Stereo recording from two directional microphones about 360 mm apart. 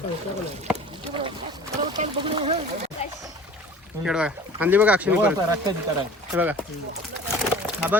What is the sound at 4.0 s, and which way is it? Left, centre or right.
Speech, centre.